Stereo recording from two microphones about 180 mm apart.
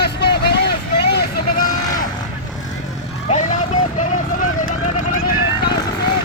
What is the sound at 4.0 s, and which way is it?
Vehicle, 45° left (ahead or behind).